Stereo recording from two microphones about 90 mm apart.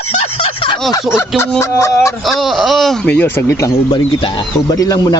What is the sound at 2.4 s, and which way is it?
Speech, centre (ahead or behind).